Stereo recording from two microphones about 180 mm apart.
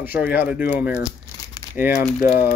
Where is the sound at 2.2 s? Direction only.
50° left (ahead or behind).